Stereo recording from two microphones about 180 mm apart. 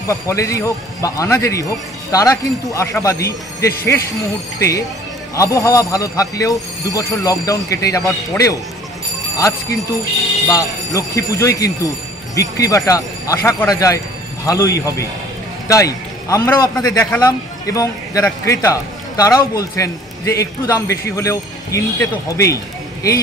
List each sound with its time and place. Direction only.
0.1 s a man's voice: 15° left (ahead or behind)
10.5 s a man's voice: 20° left (ahead or behind)